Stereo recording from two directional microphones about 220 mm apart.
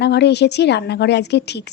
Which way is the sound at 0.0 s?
50° left (ahead or behind).